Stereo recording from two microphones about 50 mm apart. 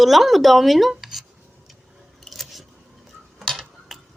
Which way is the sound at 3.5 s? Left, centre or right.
Centre.